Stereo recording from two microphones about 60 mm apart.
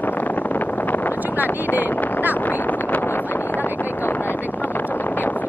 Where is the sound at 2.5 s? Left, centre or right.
Left.